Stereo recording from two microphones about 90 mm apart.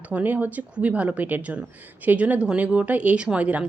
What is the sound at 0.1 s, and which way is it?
A woman's voice, 20° right (ahead or behind).